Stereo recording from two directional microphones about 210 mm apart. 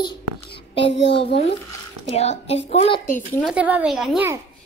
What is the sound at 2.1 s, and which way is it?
Speech, 30° left (ahead or behind).